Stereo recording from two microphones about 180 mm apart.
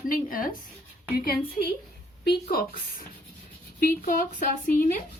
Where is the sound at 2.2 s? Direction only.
60° left (ahead or behind).